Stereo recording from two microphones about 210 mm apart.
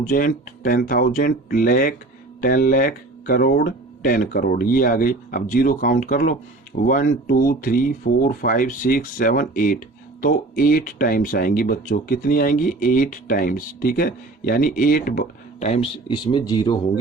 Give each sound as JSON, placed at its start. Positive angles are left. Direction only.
{"t": 0.0, "sound": "speech", "side_deg": 40}